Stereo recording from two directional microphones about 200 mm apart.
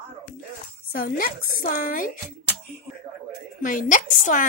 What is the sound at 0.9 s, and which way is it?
Speech, 45° left (ahead or behind).